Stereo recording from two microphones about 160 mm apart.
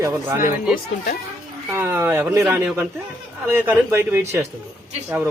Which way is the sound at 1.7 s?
15° right (ahead or behind).